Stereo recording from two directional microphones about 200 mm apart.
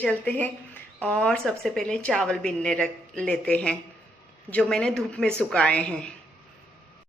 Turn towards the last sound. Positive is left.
turn(degrees=5)  # may be behind; listen again after turning